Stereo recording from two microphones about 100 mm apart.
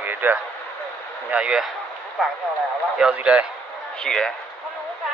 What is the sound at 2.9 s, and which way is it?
Speech, 10° right (ahead or behind).